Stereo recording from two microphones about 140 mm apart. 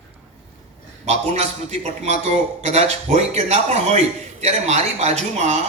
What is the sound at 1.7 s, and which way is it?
A man's voice, 50° right (ahead or behind).